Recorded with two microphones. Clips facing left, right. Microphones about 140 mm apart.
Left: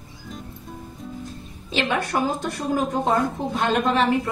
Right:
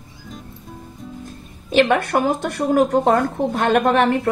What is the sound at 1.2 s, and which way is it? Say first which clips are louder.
Speech: even; 50° right (ahead or behind).